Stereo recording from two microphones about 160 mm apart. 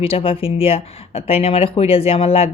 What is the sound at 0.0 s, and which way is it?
Speech, 35° left (ahead or behind).